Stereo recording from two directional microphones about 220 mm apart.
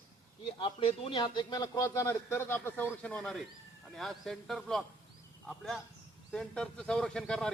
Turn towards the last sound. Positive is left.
turn(degrees=0)  # may be behind; listen again after turning